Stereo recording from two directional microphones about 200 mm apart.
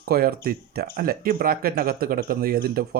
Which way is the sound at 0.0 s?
50° right (ahead or behind).